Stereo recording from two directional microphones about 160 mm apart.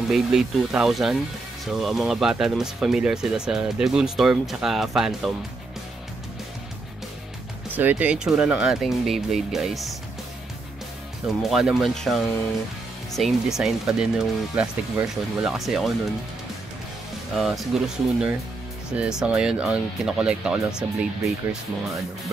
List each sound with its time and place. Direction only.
0.1 s speech: 5° right (ahead or behind)
7.7 s speech: 10° right (ahead or behind)
11.2 s speech: centre (ahead or behind)
17.4 s speech: centre (ahead or behind)